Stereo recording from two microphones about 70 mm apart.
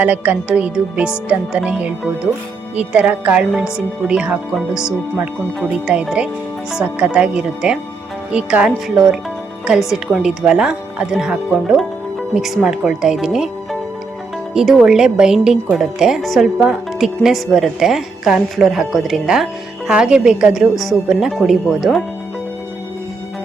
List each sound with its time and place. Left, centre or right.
0.0 s a woman's voice: right
14.5 s a woman's voice: centre